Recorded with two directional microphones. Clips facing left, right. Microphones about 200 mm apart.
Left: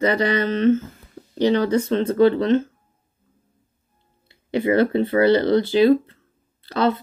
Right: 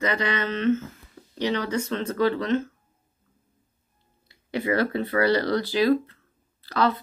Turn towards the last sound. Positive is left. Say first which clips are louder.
# left 3 dB
turn(degrees=25)  # may be behind; listen again after turning